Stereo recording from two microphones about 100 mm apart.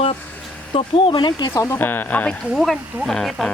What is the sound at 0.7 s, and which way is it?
Speech, 55° left (ahead or behind).